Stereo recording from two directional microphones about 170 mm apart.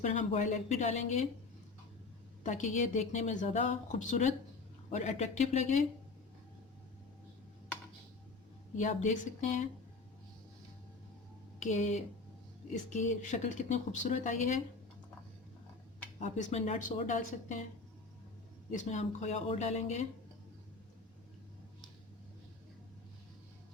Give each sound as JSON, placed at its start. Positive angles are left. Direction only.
{"t": 0.0, "sound": "a woman's voice", "side_deg": 45}
{"t": 2.4, "sound": "a woman's voice", "side_deg": 45}
{"t": 8.7, "sound": "a woman's voice", "side_deg": 45}
{"t": 11.6, "sound": "a woman's voice", "side_deg": 45}
{"t": 16.2, "sound": "a woman's voice", "side_deg": 40}
{"t": 18.7, "sound": "speech", "side_deg": 45}